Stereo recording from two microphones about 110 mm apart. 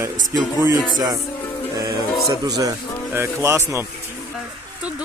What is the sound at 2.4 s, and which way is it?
Speech, 35° right (ahead or behind).